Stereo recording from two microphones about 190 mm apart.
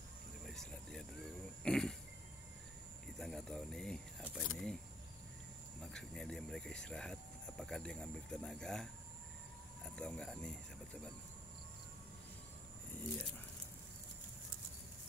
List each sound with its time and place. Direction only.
0.5 s cricket: 5° left (ahead or behind)
1.6 s a sound: 5° left (ahead or behind)
3.2 s a sound: 5° left (ahead or behind)
4.2 s speech: centre (ahead or behind)
5.9 s speech: 5° left (ahead or behind)
9.8 s speech: 5° left (ahead or behind)